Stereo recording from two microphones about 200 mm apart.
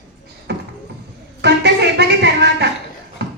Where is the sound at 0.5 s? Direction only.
60° right (ahead or behind).